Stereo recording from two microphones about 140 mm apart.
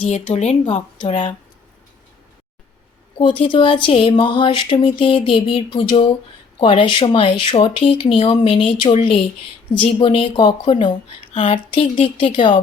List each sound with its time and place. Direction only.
0.0 s a woman's voice: 55° left (ahead or behind)
3.2 s speech: 40° left (ahead or behind)